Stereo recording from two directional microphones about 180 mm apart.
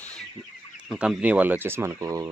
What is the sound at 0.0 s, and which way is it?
Chicken, 5° left (ahead or behind).